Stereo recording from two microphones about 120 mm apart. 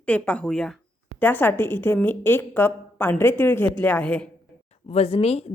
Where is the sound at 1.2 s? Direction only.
15° left (ahead or behind).